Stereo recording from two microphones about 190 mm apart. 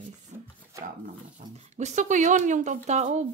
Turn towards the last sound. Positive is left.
turn(degrees=-35)  # may be behind; listen again after turning